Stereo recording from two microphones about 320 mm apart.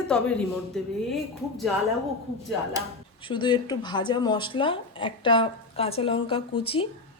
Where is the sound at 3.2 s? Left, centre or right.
Centre.